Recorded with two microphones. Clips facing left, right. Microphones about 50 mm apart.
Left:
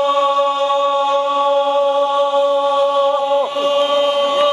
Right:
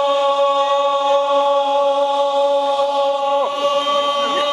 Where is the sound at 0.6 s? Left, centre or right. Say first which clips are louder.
Even; centre.